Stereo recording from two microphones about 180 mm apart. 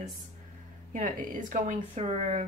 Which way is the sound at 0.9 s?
45° right (ahead or behind).